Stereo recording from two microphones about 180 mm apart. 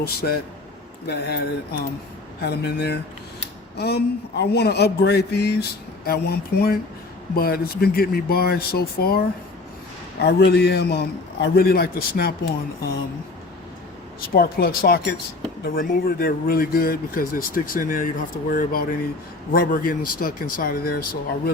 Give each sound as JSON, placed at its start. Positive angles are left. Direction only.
{"t": 0.0, "sound": "a man's voice", "side_deg": 60}
{"t": 14.3, "sound": "a man's voice", "side_deg": 55}